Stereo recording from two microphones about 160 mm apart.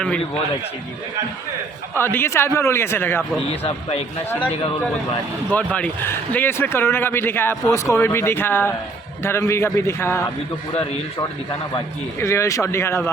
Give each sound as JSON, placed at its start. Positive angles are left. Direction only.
{"t": 2.0, "sound": "speech", "side_deg": 15}
{"t": 3.4, "sound": "a man's voice", "side_deg": 40}
{"t": 4.3, "sound": "speech", "side_deg": 10}
{"t": 5.5, "sound": "speech", "side_deg": 10}
{"t": 12.2, "sound": "speech", "side_deg": 20}